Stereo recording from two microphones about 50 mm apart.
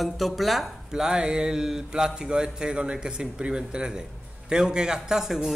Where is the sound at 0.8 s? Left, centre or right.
Centre.